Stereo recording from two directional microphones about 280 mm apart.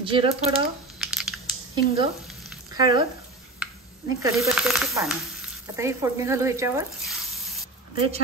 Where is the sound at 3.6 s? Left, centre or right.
Centre.